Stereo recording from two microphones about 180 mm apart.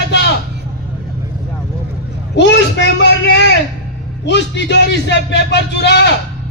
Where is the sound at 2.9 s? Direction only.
70° left (ahead or behind).